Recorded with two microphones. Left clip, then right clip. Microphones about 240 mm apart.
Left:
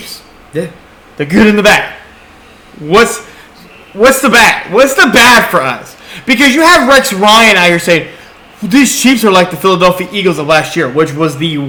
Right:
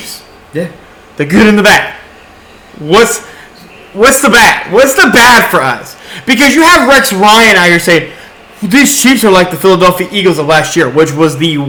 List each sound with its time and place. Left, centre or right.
0.5 s speech: left
1.1 s a man's voice: right
3.9 s a man's voice: right